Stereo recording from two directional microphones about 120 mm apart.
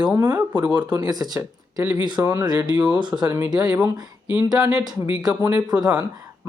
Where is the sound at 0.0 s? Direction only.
35° right (ahead or behind).